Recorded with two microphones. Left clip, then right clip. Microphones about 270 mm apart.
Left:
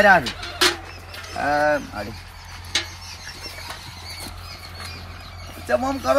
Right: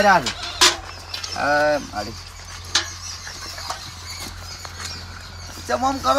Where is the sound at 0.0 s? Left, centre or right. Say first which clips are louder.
Left 1 dB; centre.